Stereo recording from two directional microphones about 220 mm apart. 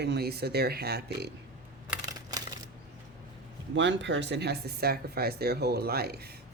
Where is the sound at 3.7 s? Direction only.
55° right (ahead or behind).